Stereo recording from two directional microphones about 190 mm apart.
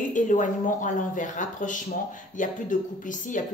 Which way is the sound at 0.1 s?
40° left (ahead or behind).